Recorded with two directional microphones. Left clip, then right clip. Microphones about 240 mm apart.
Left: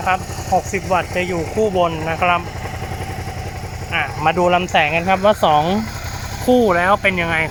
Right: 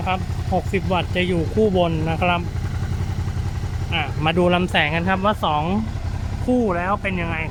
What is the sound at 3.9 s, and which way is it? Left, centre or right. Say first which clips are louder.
Speech: left 5 dB; centre.